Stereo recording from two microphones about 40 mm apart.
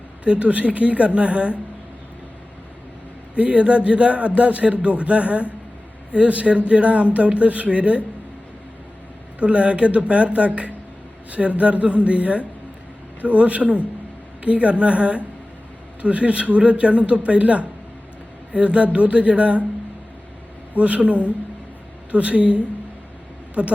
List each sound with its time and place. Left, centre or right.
0.3 s speech: right
3.3 s speech: right
9.4 s speech: right
20.7 s speech: right